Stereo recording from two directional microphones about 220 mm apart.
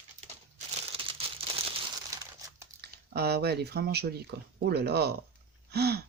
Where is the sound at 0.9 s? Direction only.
25° right (ahead or behind).